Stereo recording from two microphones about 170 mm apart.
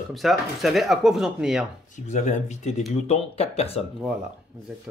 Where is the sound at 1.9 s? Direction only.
45° left (ahead or behind).